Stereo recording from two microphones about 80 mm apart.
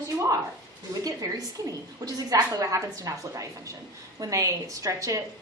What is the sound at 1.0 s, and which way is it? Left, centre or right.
A woman's voice, right.